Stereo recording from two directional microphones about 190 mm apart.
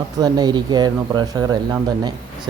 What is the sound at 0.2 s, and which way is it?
Speech, 20° right (ahead or behind).